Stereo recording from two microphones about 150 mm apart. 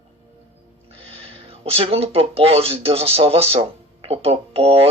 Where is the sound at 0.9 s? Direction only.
40° right (ahead or behind).